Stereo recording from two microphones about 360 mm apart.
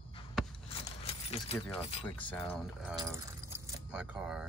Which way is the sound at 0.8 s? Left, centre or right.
Centre.